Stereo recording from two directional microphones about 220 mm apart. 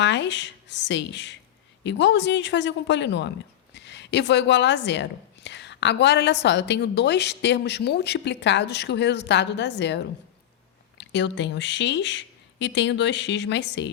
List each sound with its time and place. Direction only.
0.0 s a woman's voice: 55° left (ahead or behind)